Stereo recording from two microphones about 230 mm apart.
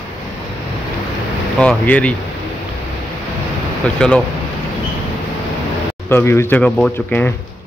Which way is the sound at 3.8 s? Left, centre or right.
Centre.